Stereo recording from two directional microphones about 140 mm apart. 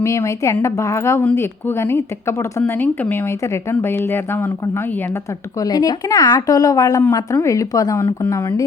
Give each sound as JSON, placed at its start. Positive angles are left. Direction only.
{"t": 0.0, "sound": "a woman's voice", "side_deg": 20}